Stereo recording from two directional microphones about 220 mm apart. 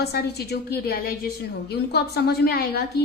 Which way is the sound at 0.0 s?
45° left (ahead or behind).